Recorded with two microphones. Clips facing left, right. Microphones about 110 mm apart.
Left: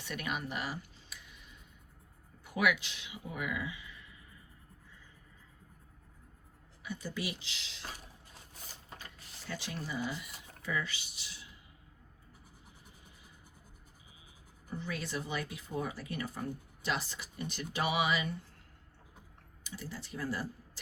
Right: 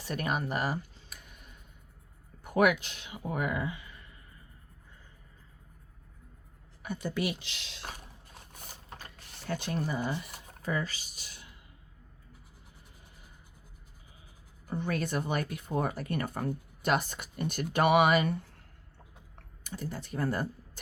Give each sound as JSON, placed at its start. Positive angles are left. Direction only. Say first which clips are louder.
{"t": 0.0, "sound": "a sound", "louder": "right 6 dB", "side_deg": -40}
{"t": 2.4, "sound": "speech", "louder": "right 6 dB", "side_deg": -50}
{"t": 6.8, "sound": "speech", "louder": "right 6 dB", "side_deg": -55}
{"t": 9.1, "sound": "speech", "louder": "right 8 dB", "side_deg": -60}
{"t": 14.7, "sound": "speech", "louder": "right 7 dB", "side_deg": -55}
{"t": 19.6, "sound": "speech", "louder": "right 6 dB", "side_deg": -50}